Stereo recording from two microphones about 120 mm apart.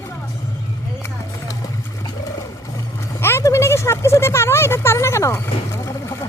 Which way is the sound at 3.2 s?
20° left (ahead or behind).